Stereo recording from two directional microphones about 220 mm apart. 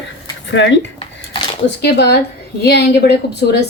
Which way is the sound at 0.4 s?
55° left (ahead or behind).